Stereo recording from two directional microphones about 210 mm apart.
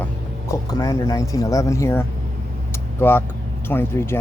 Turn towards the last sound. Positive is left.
turn(degrees=10)  # may be behind; listen again after turning